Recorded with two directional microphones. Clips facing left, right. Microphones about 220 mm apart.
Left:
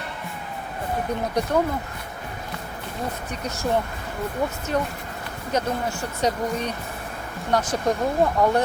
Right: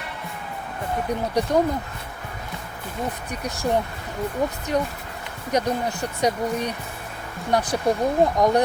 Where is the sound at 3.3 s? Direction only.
15° right (ahead or behind).